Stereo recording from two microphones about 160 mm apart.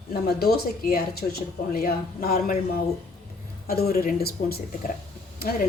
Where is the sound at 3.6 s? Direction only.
75° left (ahead or behind).